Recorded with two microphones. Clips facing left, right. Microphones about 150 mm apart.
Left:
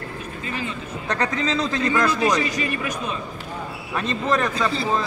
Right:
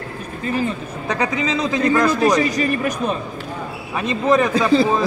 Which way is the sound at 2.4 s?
40° right (ahead or behind).